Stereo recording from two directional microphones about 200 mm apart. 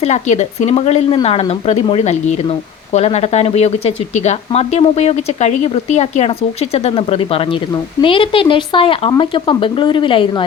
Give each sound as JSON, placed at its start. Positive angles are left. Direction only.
{"t": 0.0, "sound": "speech", "side_deg": 35}